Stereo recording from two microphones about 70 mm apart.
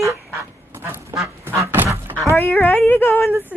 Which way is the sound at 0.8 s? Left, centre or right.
Right.